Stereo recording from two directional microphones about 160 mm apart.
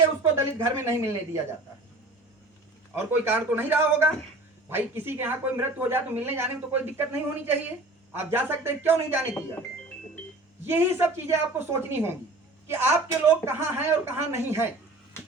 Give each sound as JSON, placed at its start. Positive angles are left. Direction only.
{"t": 0.2, "sound": "a woman's voice", "side_deg": -15}
{"t": 2.9, "sound": "a woman's voice", "side_deg": -15}
{"t": 10.7, "sound": "a woman's voice", "side_deg": -15}